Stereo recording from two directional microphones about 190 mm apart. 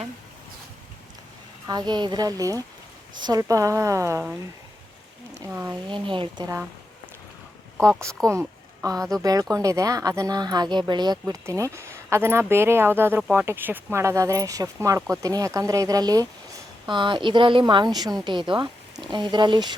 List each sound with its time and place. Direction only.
1.6 s speech: 20° right (ahead or behind)
8.3 s a woman's voice: 15° right (ahead or behind)